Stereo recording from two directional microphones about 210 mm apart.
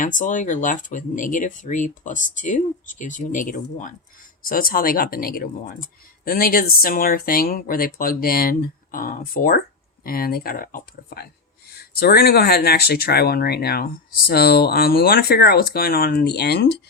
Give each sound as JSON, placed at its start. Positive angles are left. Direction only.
{"t": 0.0, "sound": "speech", "side_deg": 40}